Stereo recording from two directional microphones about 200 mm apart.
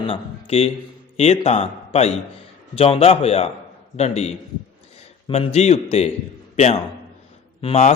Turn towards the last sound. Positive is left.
turn(degrees=30)  # may be behind; listen again after turning